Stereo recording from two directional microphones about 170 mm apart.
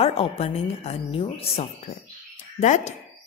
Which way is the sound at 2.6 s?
45° left (ahead or behind).